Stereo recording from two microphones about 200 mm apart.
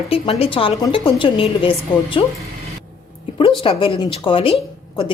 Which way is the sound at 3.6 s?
25° left (ahead or behind).